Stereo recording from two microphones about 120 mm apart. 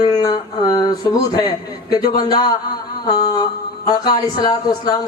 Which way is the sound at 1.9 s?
35° left (ahead or behind).